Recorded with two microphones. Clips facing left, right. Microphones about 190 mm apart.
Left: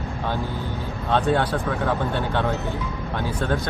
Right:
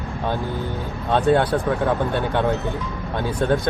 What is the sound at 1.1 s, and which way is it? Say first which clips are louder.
Speech: right 3 dB; 15° right (ahead or behind).